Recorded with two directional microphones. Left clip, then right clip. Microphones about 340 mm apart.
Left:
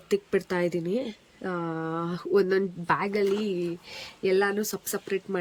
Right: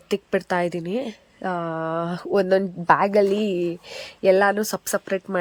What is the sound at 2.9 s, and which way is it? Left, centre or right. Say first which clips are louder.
Speech: right 10 dB; right.